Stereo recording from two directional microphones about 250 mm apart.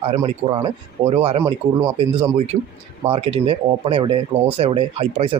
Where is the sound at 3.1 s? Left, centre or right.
Right.